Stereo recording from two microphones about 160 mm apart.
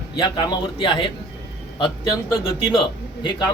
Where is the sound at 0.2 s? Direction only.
25° left (ahead or behind).